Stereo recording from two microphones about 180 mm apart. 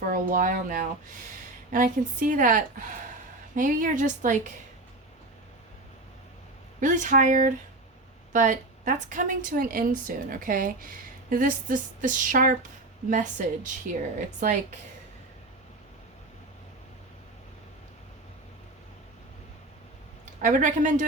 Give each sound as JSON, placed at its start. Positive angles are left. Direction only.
{"t": 0.1, "sound": "a woman's voice", "side_deg": -50}
{"t": 6.7, "sound": "a woman's voice", "side_deg": -45}
{"t": 20.4, "sound": "a woman's voice", "side_deg": -45}